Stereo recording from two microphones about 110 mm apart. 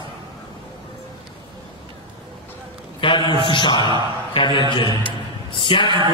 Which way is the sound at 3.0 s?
50° left (ahead or behind).